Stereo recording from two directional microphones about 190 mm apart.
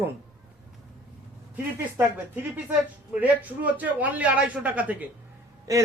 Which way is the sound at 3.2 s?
10° right (ahead or behind).